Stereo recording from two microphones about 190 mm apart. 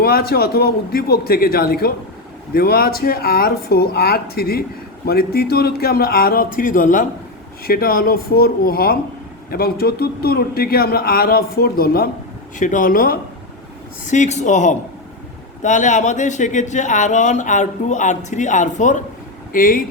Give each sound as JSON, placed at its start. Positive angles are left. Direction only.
{"t": 0.0, "sound": "speech", "side_deg": 55}
{"t": 12.5, "sound": "speech", "side_deg": 45}